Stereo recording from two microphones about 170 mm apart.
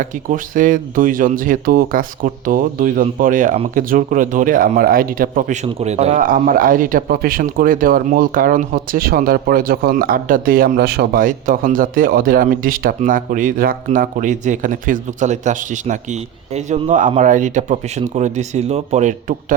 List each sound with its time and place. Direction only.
0.0 s speech: 50° right (ahead or behind)
6.1 s speech: 55° right (ahead or behind)